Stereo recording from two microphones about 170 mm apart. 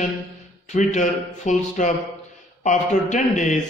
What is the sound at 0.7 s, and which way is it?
Speech, 45° left (ahead or behind).